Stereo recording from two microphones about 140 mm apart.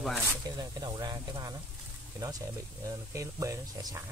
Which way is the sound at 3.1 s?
20° right (ahead or behind).